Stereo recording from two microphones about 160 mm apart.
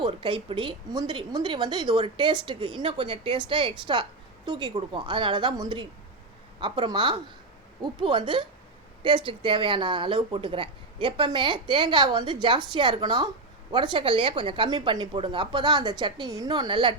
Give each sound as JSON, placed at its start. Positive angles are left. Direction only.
{"t": 0.0, "sound": "speech", "side_deg": -30}